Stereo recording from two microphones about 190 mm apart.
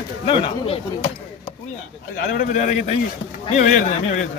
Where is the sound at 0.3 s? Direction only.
30° left (ahead or behind).